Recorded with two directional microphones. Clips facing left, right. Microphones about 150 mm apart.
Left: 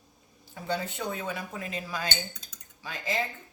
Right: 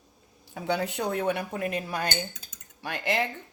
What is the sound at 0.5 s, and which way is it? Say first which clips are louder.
Speech: right 4 dB; 75° right (ahead or behind).